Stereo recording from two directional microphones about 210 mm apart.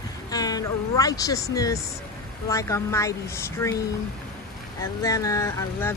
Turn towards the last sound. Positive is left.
turn(degrees=15)  # may be behind; listen again after turning